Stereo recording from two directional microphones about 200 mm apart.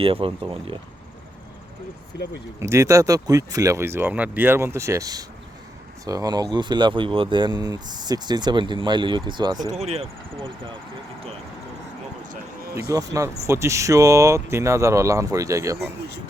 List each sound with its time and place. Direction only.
0.0 s speech: 25° right (ahead or behind)
2.6 s speech: 15° right (ahead or behind)
9.7 s speech: 30° right (ahead or behind)
12.9 s speech: 15° right (ahead or behind)